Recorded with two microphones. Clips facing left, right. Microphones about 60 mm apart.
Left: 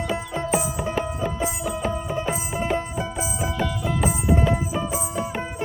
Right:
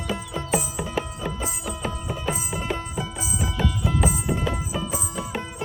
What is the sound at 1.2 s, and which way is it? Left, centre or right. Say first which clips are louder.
Music: left 4 dB; centre.